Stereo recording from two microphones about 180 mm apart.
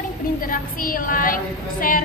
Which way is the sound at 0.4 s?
50° left (ahead or behind).